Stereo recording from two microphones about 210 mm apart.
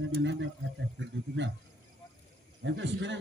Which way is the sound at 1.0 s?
60° right (ahead or behind).